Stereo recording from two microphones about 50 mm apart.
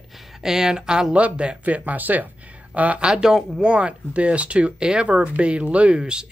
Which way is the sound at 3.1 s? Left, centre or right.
Centre.